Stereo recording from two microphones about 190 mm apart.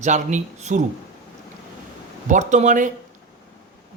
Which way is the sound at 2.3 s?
40° right (ahead or behind).